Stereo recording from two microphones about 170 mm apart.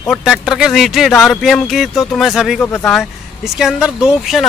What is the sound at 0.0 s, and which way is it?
Speech, centre (ahead or behind).